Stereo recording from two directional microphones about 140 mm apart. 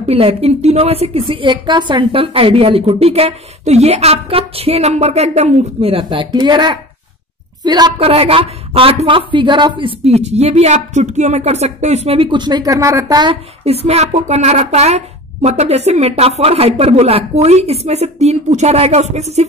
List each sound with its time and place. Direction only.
0.1 s a woman's voice: 45° right (ahead or behind)
8.0 s a woman's voice: 45° right (ahead or behind)
13.8 s a woman's voice: 50° right (ahead or behind)